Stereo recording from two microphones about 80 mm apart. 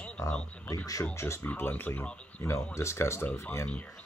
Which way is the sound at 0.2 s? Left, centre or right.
Left.